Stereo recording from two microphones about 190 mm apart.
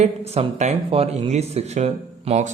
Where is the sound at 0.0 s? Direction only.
35° right (ahead or behind).